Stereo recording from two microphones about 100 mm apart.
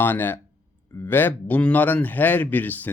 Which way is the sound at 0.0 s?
20° left (ahead or behind).